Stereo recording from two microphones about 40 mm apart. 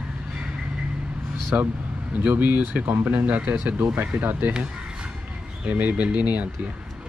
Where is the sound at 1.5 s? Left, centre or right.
Right.